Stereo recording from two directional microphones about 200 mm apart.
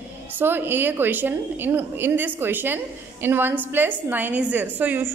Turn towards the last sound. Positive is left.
turn(degrees=-10)  # may be behind; listen again after turning